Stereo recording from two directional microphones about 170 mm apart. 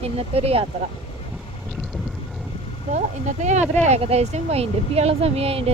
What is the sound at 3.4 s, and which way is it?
Speech, 45° right (ahead or behind).